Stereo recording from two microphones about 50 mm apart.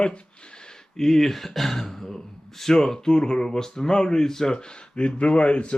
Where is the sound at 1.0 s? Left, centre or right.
Centre.